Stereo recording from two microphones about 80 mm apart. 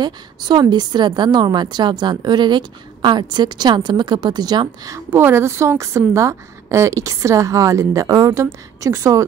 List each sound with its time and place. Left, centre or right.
0.0 s a woman's voice: right
4.9 s a woman's voice: right